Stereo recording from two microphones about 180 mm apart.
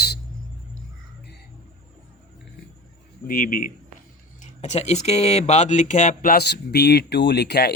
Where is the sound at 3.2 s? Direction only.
50° left (ahead or behind).